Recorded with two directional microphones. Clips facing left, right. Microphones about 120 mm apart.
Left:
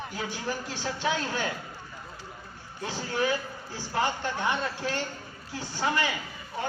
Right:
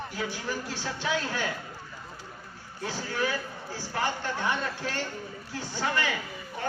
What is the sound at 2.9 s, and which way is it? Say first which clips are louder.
Speech: left 2 dB; 20° left (ahead or behind).